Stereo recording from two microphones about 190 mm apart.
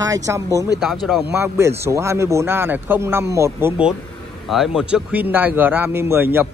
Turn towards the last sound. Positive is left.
turn(degrees=-10)  # may be behind; listen again after turning